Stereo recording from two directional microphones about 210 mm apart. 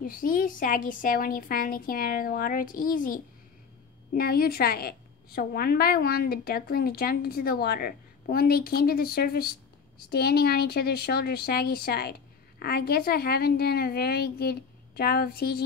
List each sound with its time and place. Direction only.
0.0 s a woman's voice: 40° left (ahead or behind)